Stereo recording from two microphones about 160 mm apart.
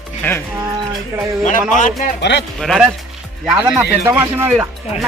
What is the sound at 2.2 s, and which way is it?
Speech, 90° left.